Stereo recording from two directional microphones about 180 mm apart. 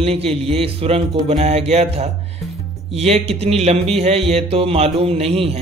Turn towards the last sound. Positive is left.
turn(degrees=-35)  # may be behind; listen again after turning